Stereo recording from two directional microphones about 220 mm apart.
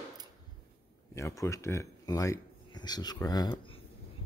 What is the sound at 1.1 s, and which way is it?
Speech, 10° left (ahead or behind).